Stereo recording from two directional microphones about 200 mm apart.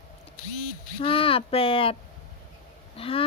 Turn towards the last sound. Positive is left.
turn(degrees=30)  # may be behind; listen again after turning